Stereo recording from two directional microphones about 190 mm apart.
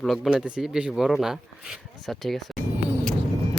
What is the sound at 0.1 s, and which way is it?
Speech, 5° right (ahead or behind).